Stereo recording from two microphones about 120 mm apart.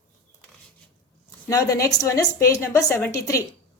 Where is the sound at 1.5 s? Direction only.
30° left (ahead or behind).